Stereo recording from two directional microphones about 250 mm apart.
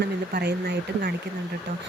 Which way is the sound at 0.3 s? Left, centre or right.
Right.